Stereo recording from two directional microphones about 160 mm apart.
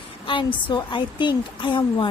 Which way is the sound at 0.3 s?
30° left (ahead or behind).